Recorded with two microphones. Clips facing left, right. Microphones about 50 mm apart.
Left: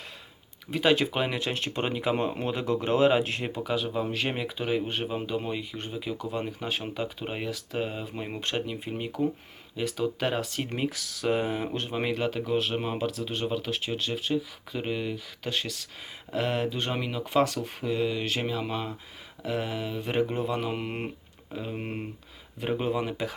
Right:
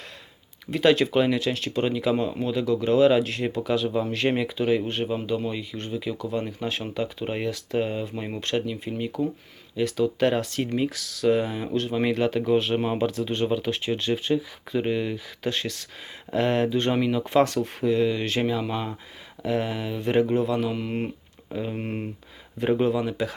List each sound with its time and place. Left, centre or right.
0.7 s speech: centre
1.4 s speech: left
3.4 s speech: centre
8.4 s speech: centre
10.8 s speech: centre
12.0 s speech: centre
20.3 s speech: centre
21.5 s speech: centre
22.9 s speech: centre